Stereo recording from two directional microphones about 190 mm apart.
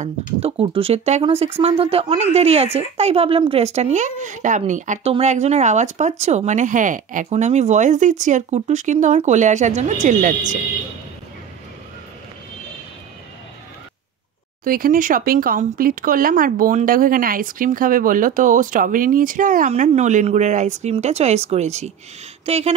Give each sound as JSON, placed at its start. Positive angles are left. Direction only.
{"t": 0.4, "sound": "speech", "side_deg": -30}
{"t": 14.6, "sound": "speech", "side_deg": -50}